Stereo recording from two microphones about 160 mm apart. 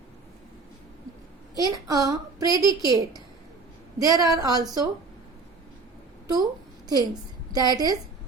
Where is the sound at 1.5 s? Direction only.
25° right (ahead or behind).